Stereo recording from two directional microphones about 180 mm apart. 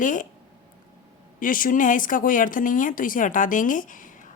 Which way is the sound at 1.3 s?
50° left (ahead or behind).